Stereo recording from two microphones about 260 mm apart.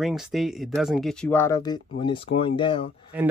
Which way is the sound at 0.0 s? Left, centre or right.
Centre.